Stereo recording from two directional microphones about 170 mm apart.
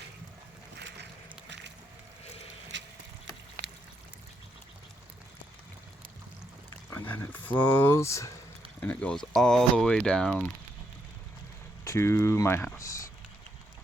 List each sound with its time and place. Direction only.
2.7 s vehicle: 90° right
6.9 s speech: 10° left (ahead or behind)
11.9 s speech: 15° left (ahead or behind)